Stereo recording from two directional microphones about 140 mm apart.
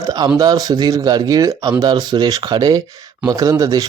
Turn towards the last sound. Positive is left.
turn(degrees=-25)  # may be behind; listen again after turning